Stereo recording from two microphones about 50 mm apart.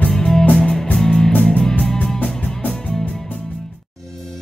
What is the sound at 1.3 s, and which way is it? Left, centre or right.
Music, left.